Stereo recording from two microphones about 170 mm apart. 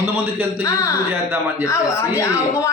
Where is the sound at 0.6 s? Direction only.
20° left (ahead or behind).